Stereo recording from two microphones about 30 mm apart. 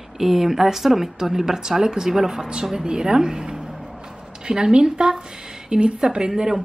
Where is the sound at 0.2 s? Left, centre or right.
Centre.